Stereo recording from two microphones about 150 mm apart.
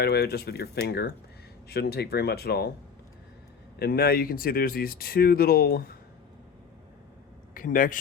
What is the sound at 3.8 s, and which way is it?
Speech, 90° left.